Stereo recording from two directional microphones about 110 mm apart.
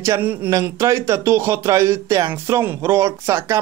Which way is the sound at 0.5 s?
30° right (ahead or behind).